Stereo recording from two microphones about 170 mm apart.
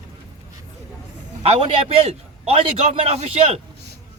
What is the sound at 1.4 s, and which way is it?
A man's voice, 35° right (ahead or behind).